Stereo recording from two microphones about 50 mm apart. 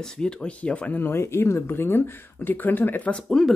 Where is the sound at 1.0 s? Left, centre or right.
Left.